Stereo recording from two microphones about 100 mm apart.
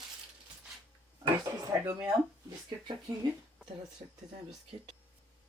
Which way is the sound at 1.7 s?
30° right (ahead or behind).